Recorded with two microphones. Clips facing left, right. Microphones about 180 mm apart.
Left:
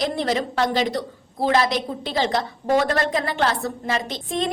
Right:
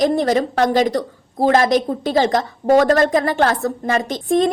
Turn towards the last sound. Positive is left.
turn(degrees=-45)  # may be behind; listen again after turning